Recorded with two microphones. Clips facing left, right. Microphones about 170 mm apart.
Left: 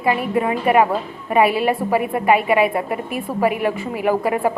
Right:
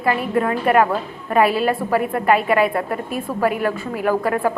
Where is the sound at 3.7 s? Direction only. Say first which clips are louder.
Left 1 dB; 15° left (ahead or behind).